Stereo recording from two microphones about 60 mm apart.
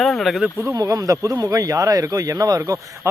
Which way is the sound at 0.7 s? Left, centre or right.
Right.